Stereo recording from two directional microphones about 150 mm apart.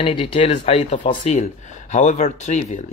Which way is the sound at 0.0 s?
35° left (ahead or behind).